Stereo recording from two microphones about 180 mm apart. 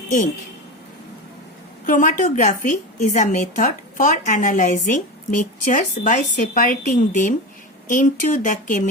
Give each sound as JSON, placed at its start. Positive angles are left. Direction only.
{"t": 1.9, "sound": "a woman's voice", "side_deg": 45}